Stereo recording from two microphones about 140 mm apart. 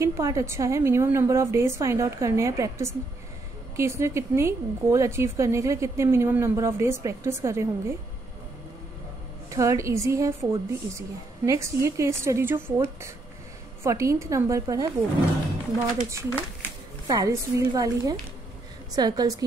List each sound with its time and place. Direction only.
0.0 s a woman's voice: 25° right (ahead or behind)
9.5 s a woman's voice: 20° right (ahead or behind)
16.1 s a woman's voice: 20° right (ahead or behind)